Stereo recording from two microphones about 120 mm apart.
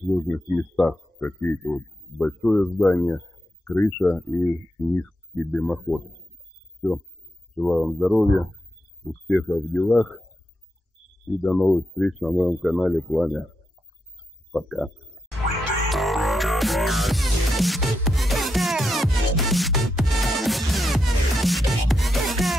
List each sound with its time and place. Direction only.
0.0 s speech: 5° left (ahead or behind)
7.5 s speech: centre (ahead or behind)
11.2 s speech: 5° left (ahead or behind)
14.5 s speech: centre (ahead or behind)
15.9 s music: centre (ahead or behind)